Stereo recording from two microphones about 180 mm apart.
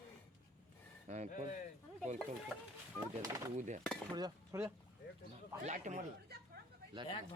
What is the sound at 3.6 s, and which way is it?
Speech, 45° right (ahead or behind).